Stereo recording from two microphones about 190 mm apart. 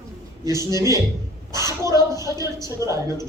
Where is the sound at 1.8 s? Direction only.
15° right (ahead or behind).